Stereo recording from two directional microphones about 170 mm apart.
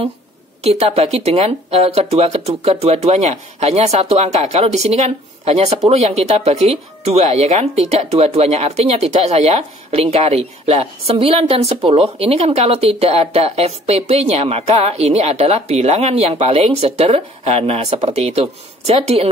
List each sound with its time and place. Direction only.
0.7 s speech: 35° right (ahead or behind)